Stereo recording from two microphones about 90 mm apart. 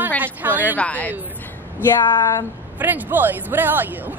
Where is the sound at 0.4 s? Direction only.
20° right (ahead or behind).